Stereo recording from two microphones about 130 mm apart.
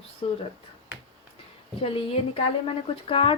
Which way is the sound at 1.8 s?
45° left (ahead or behind).